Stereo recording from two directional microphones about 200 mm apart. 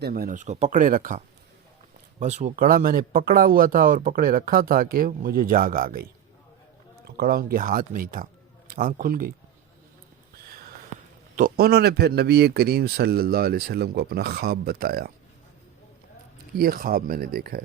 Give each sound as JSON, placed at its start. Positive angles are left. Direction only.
{"t": 0.0, "sound": "speech", "side_deg": -45}
{"t": 10.9, "sound": "a sound", "side_deg": 30}
{"t": 11.3, "sound": "speech", "side_deg": -45}
{"t": 16.6, "sound": "speech", "side_deg": -45}